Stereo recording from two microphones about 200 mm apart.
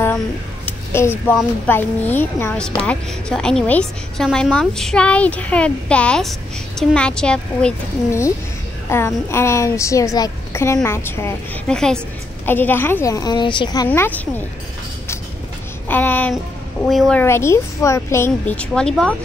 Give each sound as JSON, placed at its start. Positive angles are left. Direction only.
{"t": 0.7, "sound": "a sound", "side_deg": 10}
{"t": 1.2, "sound": "a woman's voice", "side_deg": 10}
{"t": 13.8, "sound": "a woman's voice", "side_deg": 10}
{"t": 15.9, "sound": "a woman's voice", "side_deg": 10}
{"t": 17.2, "sound": "a woman's voice", "side_deg": 15}